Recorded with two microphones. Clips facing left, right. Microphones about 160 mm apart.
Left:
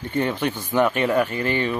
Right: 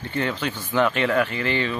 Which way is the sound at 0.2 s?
15° left (ahead or behind).